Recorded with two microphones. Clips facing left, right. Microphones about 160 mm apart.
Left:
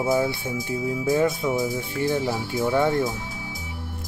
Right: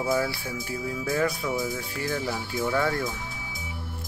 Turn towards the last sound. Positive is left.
turn(degrees=20)  # may be behind; listen again after turning